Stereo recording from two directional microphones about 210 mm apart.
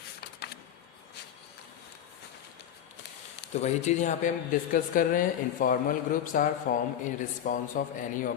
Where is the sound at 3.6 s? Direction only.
35° left (ahead or behind).